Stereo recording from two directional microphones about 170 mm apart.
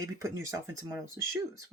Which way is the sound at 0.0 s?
20° right (ahead or behind).